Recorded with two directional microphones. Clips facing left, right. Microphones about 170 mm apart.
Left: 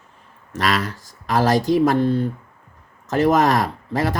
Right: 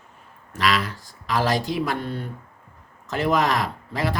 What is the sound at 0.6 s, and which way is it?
Speech, 45° left (ahead or behind).